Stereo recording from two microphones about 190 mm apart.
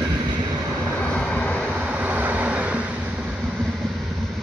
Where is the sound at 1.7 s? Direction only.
10° right (ahead or behind).